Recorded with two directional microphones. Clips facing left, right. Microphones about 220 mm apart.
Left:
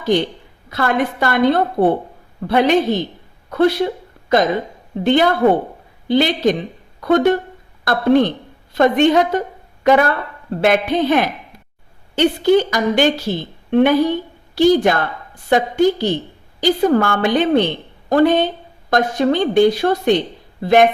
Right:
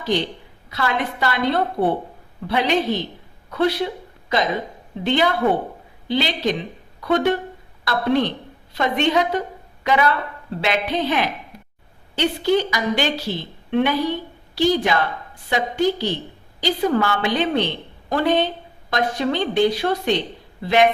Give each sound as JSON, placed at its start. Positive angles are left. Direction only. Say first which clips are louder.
{"t": 0.7, "sound": "a woman's voice", "louder": "left 5 dB", "side_deg": 50}